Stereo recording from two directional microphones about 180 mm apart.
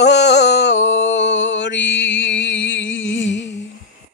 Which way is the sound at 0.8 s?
90° left.